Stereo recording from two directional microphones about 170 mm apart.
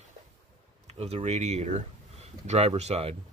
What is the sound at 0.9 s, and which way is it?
Speech, 40° right (ahead or behind).